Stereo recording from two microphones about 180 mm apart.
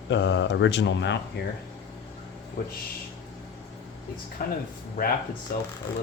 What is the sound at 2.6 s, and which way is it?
Speech, 50° left (ahead or behind).